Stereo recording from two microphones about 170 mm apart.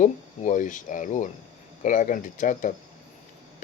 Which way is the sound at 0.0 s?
45° left (ahead or behind).